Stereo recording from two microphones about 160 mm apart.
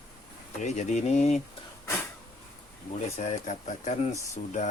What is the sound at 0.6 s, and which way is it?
Speech, 45° left (ahead or behind).